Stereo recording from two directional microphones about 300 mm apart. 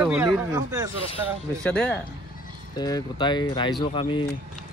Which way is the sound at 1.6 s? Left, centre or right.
Centre.